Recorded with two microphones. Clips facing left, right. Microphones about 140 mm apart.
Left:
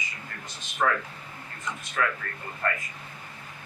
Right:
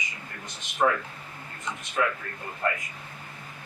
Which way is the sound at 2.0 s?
20° right (ahead or behind).